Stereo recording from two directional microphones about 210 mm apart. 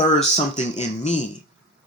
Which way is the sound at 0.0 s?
30° left (ahead or behind).